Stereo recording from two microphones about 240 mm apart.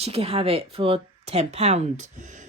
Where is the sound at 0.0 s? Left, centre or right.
Right.